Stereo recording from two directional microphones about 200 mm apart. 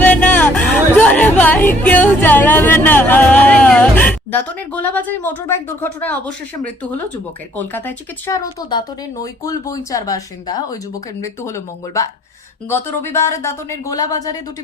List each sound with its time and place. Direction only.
0.0 s music: 5° left (ahead or behind)
7.5 s speech: 10° left (ahead or behind)